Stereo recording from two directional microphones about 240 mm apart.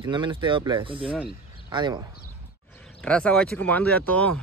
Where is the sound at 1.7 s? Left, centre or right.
Centre.